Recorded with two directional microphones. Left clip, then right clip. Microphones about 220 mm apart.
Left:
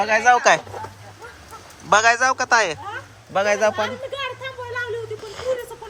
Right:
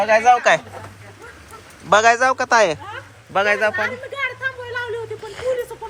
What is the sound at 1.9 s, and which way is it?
A man's voice, 10° left (ahead or behind).